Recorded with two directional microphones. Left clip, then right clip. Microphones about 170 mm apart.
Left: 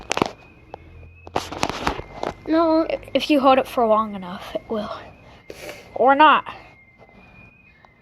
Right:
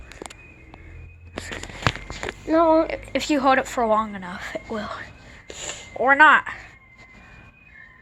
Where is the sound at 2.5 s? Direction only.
35° left (ahead or behind).